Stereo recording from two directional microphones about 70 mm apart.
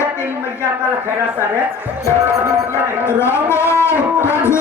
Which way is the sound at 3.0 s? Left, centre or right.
Left.